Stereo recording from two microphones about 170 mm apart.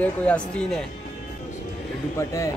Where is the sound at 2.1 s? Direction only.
20° left (ahead or behind).